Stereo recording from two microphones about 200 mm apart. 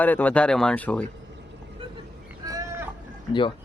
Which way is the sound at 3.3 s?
25° left (ahead or behind).